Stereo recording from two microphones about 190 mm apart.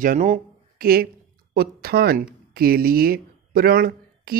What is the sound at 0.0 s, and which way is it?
Speech, 45° right (ahead or behind).